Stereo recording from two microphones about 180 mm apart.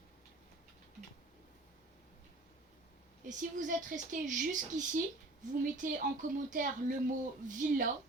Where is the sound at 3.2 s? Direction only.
45° right (ahead or behind).